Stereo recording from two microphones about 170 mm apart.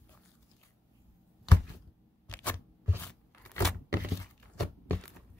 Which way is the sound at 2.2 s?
10° left (ahead or behind).